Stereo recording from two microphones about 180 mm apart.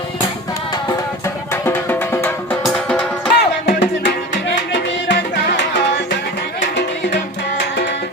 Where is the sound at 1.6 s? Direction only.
10° left (ahead or behind).